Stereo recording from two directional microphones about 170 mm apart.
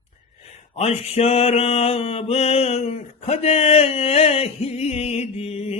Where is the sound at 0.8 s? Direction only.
35° left (ahead or behind).